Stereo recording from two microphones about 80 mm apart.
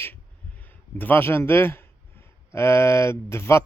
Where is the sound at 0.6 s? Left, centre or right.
Left.